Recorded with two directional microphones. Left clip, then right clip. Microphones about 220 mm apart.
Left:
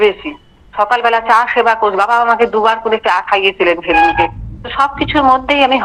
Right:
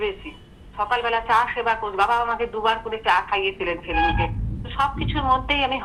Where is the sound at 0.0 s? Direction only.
45° left (ahead or behind).